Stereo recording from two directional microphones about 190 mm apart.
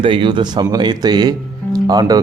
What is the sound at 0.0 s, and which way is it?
Speech, 25° right (ahead or behind).